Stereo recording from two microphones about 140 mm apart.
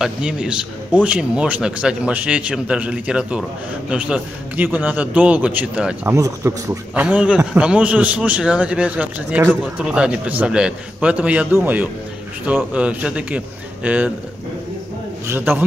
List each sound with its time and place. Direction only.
0.0 s a man's voice: 5° right (ahead or behind)
6.1 s speech: 20° right (ahead or behind)
6.9 s a man's voice: 10° right (ahead or behind)
15.2 s a man's voice: 15° right (ahead or behind)